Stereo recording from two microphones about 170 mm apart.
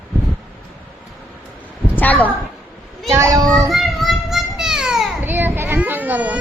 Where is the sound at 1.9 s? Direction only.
10° left (ahead or behind).